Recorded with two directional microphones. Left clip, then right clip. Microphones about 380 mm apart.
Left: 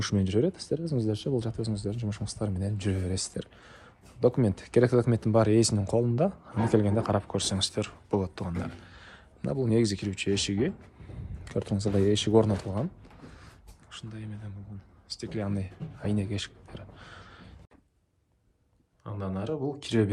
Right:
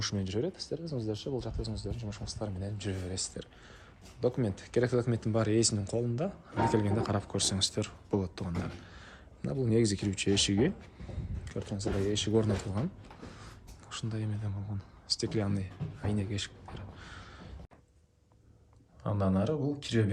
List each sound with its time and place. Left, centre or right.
0.0 s speech: centre
13.9 s speech: centre
19.0 s speech: centre